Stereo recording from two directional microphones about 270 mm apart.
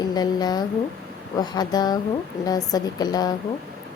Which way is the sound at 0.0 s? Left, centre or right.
Centre.